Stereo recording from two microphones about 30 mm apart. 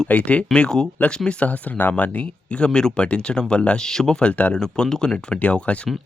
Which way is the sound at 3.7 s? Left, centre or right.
Centre.